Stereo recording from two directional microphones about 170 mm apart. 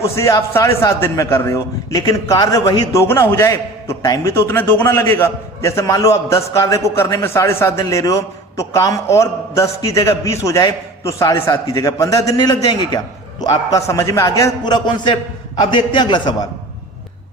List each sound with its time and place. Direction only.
0.0 s a man's voice: 20° left (ahead or behind)